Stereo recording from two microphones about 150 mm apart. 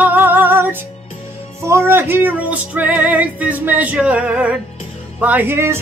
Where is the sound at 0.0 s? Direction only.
10° right (ahead or behind).